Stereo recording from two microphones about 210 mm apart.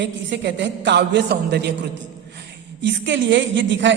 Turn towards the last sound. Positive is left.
turn(degrees=-60)  # may be behind; listen again after turning